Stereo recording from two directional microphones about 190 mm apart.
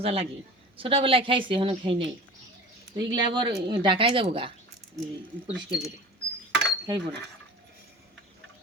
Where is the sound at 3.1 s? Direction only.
25° right (ahead or behind).